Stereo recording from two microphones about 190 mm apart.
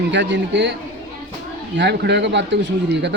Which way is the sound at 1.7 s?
65° right (ahead or behind).